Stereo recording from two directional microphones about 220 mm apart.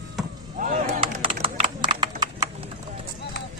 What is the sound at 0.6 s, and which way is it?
Chop, 30° right (ahead or behind).